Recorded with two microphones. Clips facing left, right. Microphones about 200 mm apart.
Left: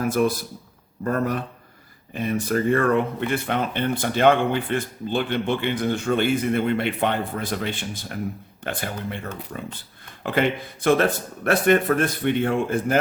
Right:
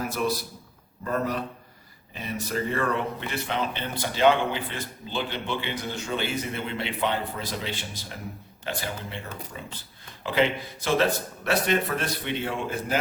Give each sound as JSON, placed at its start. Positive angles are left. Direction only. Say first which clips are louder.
{"t": 0.1, "sound": "speech", "louder": "left 6 dB", "side_deg": 50}